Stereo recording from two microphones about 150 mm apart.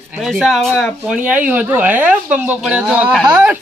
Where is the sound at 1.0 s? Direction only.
10° right (ahead or behind).